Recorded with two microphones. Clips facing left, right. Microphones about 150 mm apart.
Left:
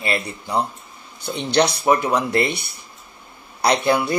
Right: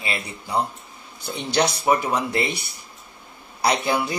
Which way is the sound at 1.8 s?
Centre (ahead or behind).